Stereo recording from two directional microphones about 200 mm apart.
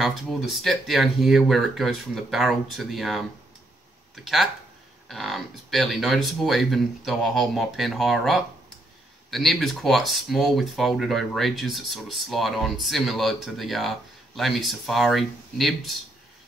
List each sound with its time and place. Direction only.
0.0 s speech: centre (ahead or behind)